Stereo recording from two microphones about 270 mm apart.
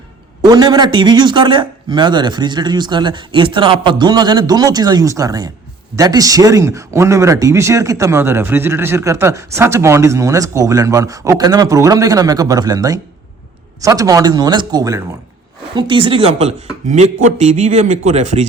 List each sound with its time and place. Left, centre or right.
0.4 s speech: centre